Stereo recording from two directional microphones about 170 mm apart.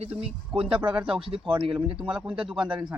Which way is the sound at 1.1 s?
30° right (ahead or behind).